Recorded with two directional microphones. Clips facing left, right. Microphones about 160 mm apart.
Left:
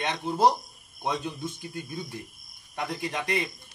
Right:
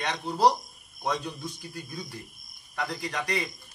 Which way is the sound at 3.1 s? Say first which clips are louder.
Left 2 dB; 20° left (ahead or behind).